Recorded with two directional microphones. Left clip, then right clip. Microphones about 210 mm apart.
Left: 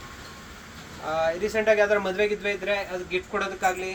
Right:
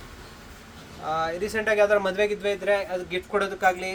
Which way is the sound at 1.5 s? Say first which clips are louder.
Right 1 dB; 60° right (ahead or behind).